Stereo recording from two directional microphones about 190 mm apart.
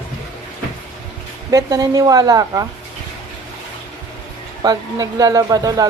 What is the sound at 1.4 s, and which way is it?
Speech, 20° right (ahead or behind).